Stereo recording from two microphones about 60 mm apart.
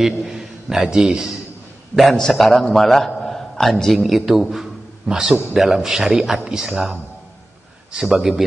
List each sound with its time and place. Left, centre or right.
0.0 s a man's voice: centre
2.0 s a man's voice: centre
8.2 s a man's voice: centre